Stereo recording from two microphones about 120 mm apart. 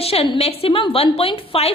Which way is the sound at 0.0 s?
55° left (ahead or behind).